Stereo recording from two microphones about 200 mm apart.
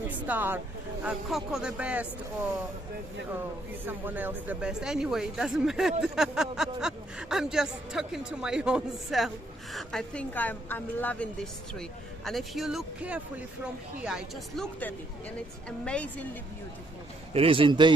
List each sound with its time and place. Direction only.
0.1 s speech: 10° right (ahead or behind)
3.8 s a woman's voice: 10° right (ahead or behind); by 16.3 s 5° left (ahead or behind)
17.3 s a man's voice: 30° right (ahead or behind)